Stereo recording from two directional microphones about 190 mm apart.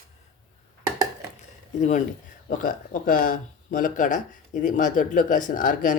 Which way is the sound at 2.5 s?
45° left (ahead or behind).